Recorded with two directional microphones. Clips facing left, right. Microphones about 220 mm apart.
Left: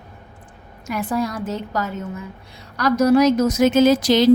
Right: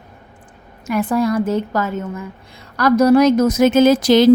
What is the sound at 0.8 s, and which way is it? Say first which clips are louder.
Speech: right 6 dB; 55° right (ahead or behind).